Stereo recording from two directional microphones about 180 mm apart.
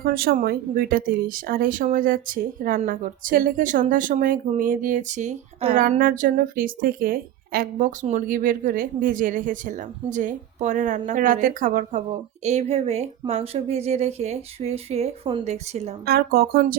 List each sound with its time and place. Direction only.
0.0 s speech: 55° right (ahead or behind); by 5.7 s 40° right (ahead or behind)
5.7 s speech: 50° right (ahead or behind)
16.0 s speech: 60° right (ahead or behind)